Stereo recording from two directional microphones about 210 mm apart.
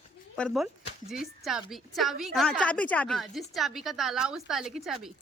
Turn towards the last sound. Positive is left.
turn(degrees=0)  # may be behind; listen again after turning